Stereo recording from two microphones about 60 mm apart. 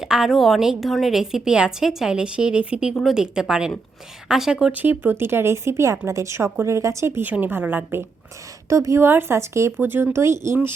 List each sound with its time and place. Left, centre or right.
0.0 s a woman's voice: centre
3.0 s a woman's voice: centre
4.7 s speech: right
7.2 s a woman's voice: right
8.7 s a woman's voice: right
9.0 s speech: right
9.8 s speech: right